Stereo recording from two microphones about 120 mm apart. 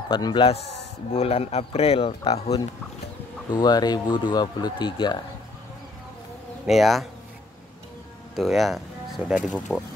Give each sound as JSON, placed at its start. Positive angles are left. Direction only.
{"t": 0.1, "sound": "speech", "side_deg": 40}
{"t": 1.1, "sound": "a man's voice", "side_deg": 55}
{"t": 3.5, "sound": "speech", "side_deg": 35}
{"t": 6.6, "sound": "speech", "side_deg": 0}
{"t": 8.4, "sound": "speech", "side_deg": 0}